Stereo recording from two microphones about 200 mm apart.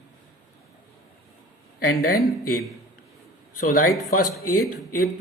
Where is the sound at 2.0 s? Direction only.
50° left (ahead or behind).